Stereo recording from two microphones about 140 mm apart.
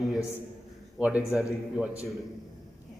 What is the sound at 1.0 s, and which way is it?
Speech, 10° right (ahead or behind).